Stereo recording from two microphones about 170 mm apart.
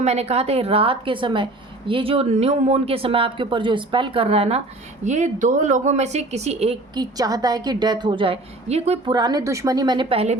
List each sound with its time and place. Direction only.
0.0 s speech: 40° right (ahead or behind)
6.9 s a woman's voice: 25° right (ahead or behind); by 9.0 s 40° right (ahead or behind)
9.0 s a woman's voice: 25° right (ahead or behind)